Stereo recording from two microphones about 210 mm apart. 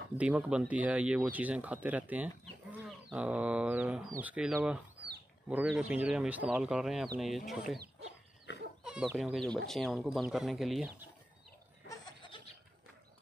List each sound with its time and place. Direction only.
0.2 s speech: 5° right (ahead or behind)
8.5 s chicken: 55° left (ahead or behind)
8.8 s speech: 5° right (ahead or behind)
11.9 s snicker: 20° left (ahead or behind)